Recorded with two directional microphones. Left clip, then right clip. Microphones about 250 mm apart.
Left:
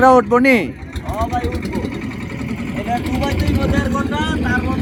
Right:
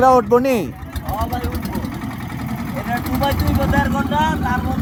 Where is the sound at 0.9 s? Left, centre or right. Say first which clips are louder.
Left 2 dB; centre.